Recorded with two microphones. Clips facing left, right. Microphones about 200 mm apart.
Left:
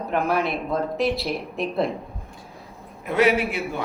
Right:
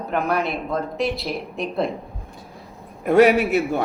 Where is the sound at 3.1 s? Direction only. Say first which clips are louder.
Right 6 dB; 45° right (ahead or behind).